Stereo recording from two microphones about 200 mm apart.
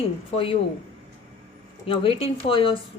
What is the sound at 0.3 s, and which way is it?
Speech, 25° left (ahead or behind).